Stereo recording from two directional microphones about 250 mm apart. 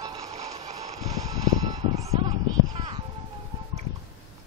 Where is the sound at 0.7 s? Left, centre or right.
Right.